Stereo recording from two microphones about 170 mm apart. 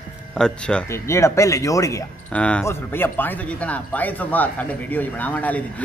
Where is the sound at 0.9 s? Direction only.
15° left (ahead or behind).